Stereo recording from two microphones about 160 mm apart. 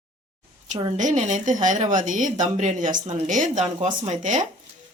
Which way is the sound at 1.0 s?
50° right (ahead or behind).